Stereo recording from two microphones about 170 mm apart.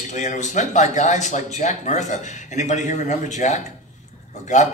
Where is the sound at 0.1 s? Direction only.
45° left (ahead or behind).